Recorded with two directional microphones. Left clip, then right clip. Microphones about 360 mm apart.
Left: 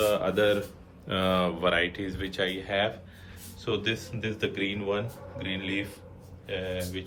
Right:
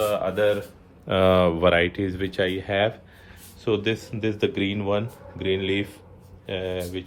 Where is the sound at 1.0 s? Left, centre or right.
Right.